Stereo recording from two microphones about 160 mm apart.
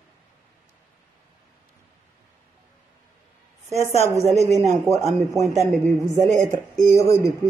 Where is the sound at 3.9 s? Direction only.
45° right (ahead or behind).